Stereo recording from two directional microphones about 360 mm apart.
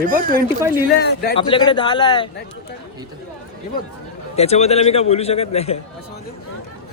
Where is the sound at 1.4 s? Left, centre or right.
Centre.